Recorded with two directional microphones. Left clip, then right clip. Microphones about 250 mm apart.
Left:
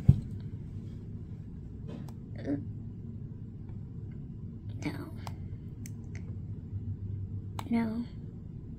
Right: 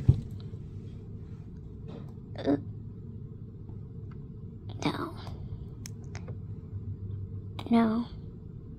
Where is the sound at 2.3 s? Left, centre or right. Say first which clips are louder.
Right 7 dB; centre.